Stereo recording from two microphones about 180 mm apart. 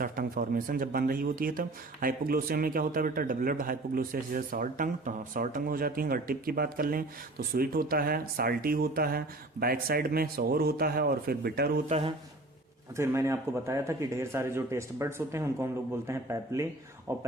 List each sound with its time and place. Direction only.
0.0 s speech: 50° right (ahead or behind)
11.9 s speech: 35° right (ahead or behind)
13.0 s a man's voice: 15° right (ahead or behind)